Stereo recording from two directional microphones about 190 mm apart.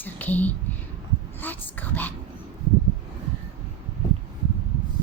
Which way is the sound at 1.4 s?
10° left (ahead or behind).